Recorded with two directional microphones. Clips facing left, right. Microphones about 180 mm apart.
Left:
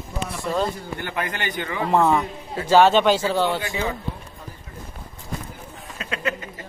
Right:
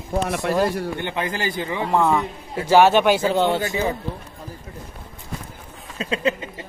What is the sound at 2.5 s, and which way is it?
Speech, 10° right (ahead or behind).